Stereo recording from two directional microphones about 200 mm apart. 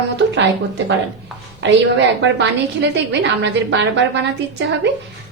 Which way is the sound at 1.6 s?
60° right (ahead or behind).